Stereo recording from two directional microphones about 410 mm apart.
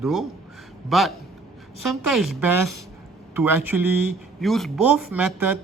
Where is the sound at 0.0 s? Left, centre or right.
Centre.